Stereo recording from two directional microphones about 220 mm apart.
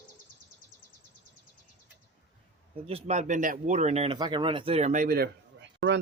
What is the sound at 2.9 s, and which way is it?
Speech, 30° right (ahead or behind).